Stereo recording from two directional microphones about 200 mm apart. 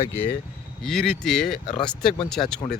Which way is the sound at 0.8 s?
Centre (ahead or behind).